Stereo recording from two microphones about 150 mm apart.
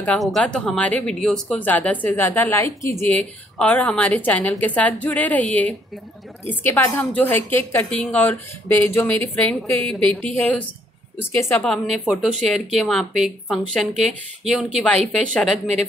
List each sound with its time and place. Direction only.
0.0 s speech: 5° left (ahead or behind)
15.6 s speech: 45° right (ahead or behind)